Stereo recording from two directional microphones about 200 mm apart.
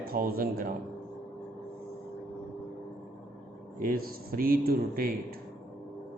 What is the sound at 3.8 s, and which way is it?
A man's voice, 45° right (ahead or behind).